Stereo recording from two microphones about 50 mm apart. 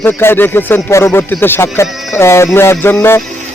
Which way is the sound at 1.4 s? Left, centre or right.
Left.